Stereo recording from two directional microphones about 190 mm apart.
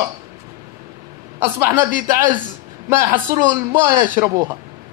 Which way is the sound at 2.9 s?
10° right (ahead or behind).